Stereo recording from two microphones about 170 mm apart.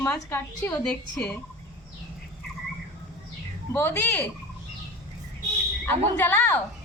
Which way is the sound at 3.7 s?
15° left (ahead or behind).